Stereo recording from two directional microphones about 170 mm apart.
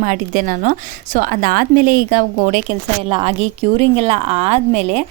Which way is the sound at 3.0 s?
30° right (ahead or behind).